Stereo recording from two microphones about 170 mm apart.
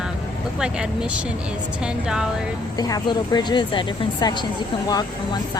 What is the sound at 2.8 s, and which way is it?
Speech, 20° left (ahead or behind).